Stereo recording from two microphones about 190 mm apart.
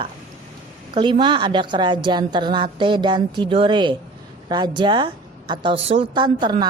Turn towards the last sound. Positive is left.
turn(degrees=-25)  # may be behind; listen again after turning